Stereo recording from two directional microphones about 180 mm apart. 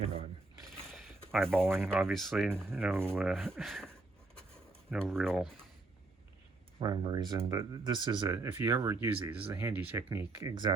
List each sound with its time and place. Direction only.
1.3 s speech: centre (ahead or behind)
1.6 s speech: 15° right (ahead or behind)
2.1 s speech: centre (ahead or behind)
2.6 s speech: 10° right (ahead or behind)
3.3 s speech: centre (ahead or behind)
4.4 s writing: 5° left (ahead or behind)
6.7 s speech: 25° right (ahead or behind)